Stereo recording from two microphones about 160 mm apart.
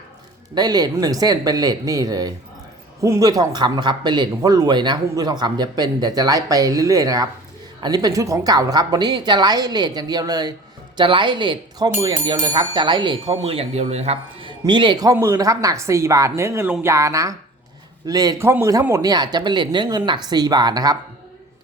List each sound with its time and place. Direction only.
0.5 s speech: 25° right (ahead or behind); by 14.5 s 40° right (ahead or behind)
14.6 s speech: 30° right (ahead or behind)